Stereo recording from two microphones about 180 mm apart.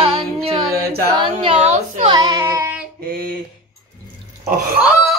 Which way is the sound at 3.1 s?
55° right (ahead or behind).